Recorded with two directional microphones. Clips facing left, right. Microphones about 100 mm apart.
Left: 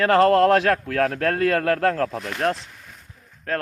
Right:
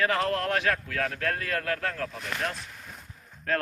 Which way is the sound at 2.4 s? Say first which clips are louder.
Left 11 dB; 70° left (ahead or behind).